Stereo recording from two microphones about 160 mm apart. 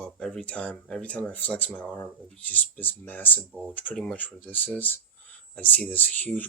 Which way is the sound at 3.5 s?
Centre (ahead or behind).